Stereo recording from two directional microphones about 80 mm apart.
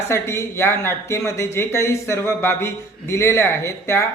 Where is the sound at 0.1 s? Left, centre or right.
Left.